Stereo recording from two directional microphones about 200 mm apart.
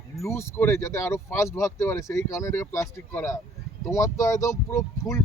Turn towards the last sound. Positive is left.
turn(degrees=15)  # may be behind; listen again after turning